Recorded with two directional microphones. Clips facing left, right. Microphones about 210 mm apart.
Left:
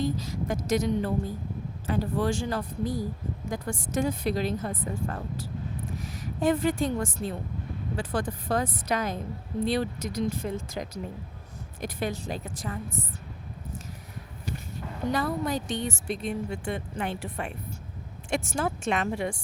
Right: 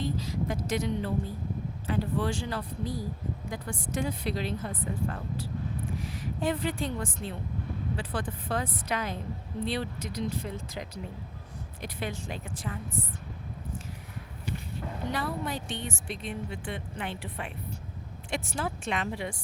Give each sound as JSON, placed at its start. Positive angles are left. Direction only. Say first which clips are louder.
{"t": 0.0, "sound": "a woman's voice", "louder": "left 2 dB", "side_deg": 45}
{"t": 15.1, "sound": "a woman's voice", "louder": "left 6 dB", "side_deg": 40}